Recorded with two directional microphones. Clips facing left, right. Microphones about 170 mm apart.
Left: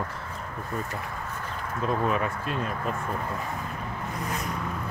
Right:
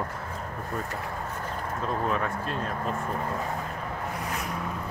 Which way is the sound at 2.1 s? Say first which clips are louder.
Left 1 dB; 10° left (ahead or behind).